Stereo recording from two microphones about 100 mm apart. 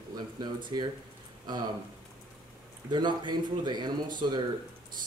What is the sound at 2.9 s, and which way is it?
Speech, 50° right (ahead or behind).